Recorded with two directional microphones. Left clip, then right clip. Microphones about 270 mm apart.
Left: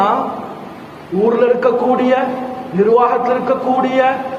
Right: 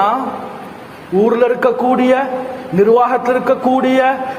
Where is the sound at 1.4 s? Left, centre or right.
Right.